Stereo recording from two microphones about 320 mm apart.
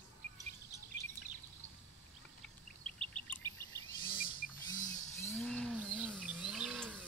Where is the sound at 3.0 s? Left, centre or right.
Centre.